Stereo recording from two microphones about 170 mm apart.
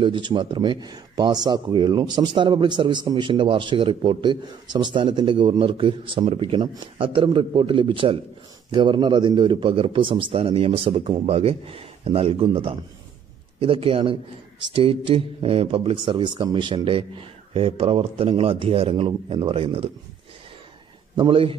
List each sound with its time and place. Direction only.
0.0 s speech: 30° right (ahead or behind)
21.2 s speech: 30° right (ahead or behind)